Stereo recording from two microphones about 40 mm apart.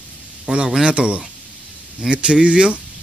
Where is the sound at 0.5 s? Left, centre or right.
Right.